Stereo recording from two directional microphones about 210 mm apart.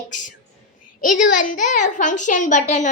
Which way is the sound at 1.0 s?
40° left (ahead or behind).